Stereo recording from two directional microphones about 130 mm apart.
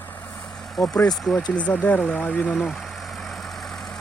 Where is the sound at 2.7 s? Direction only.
Centre (ahead or behind).